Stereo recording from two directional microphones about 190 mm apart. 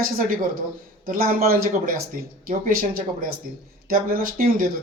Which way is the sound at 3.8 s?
50° right (ahead or behind).